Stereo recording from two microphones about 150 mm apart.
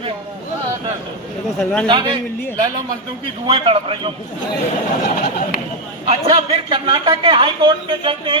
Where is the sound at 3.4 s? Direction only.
35° right (ahead or behind).